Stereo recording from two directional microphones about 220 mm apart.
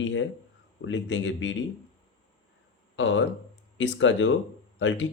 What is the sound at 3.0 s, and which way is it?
Speech, 60° left (ahead or behind).